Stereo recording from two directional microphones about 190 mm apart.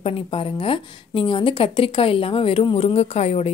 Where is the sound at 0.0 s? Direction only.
30° left (ahead or behind).